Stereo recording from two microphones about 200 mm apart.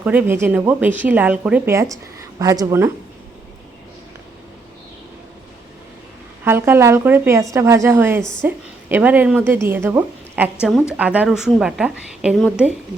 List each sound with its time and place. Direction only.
0.0 s a woman's voice: 10° right (ahead or behind)
6.4 s a woman's voice: 10° right (ahead or behind)
8.2 s a woman's voice: 5° left (ahead or behind)
8.4 s a woman's voice: 10° right (ahead or behind)